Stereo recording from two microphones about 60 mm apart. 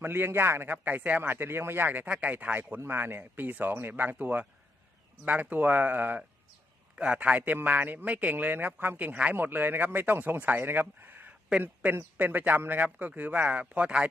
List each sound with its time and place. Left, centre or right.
0.0 s a man's voice: right; by 14.1 s centre